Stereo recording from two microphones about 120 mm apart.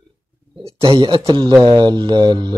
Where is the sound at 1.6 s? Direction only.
40° right (ahead or behind).